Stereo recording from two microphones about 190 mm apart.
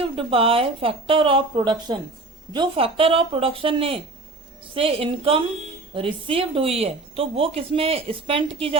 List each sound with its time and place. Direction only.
0.0 s a woman's voice: 30° right (ahead or behind)